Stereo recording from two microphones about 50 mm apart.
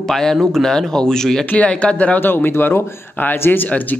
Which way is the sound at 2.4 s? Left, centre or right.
Left.